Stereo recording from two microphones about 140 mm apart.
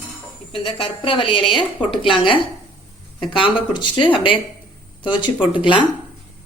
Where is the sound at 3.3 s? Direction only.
40° left (ahead or behind).